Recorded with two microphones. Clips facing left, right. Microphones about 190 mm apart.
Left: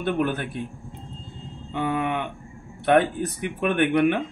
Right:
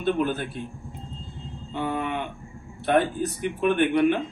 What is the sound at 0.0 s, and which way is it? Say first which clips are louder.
Speech: even; 60° left (ahead or behind).